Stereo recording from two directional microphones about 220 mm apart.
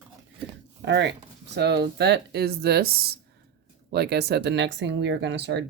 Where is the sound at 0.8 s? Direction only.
50° right (ahead or behind).